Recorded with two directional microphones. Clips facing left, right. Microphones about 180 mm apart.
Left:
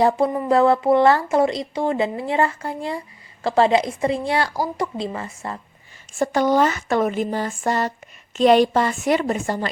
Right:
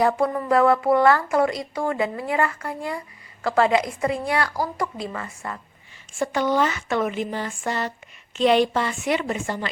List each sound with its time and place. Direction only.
0.0 s speech: 25° left (ahead or behind)
6.1 s speech: 40° left (ahead or behind)